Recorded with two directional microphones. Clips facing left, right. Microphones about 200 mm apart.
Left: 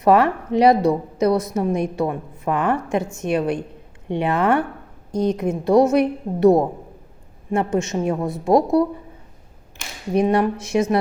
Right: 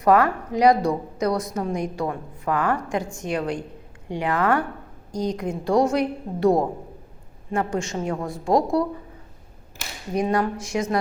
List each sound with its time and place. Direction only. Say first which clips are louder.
0.0 s a woman's voice: left 2 dB; 25° left (ahead or behind)
10.2 s a woman's voice: left 5 dB; 20° left (ahead or behind)